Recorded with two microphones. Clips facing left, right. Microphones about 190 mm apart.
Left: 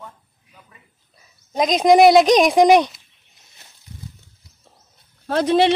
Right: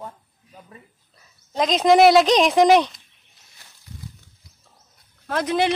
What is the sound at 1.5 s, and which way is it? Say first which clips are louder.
Speech: left 2 dB; 15° left (ahead or behind).